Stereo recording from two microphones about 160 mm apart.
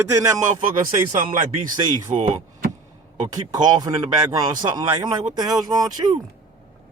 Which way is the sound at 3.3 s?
25° right (ahead or behind).